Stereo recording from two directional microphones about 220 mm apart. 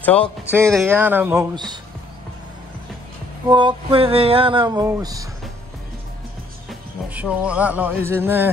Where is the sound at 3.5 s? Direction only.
20° right (ahead or behind).